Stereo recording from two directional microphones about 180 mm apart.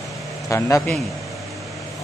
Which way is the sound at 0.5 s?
15° left (ahead or behind).